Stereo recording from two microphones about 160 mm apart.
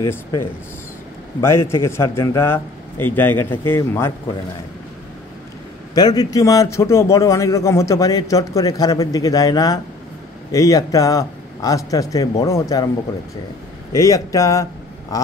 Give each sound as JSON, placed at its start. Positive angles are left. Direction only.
{"t": 0.0, "sound": "a man's voice", "side_deg": 20}
{"t": 5.9, "sound": "a man's voice", "side_deg": 25}
{"t": 13.9, "sound": "a man's voice", "side_deg": 20}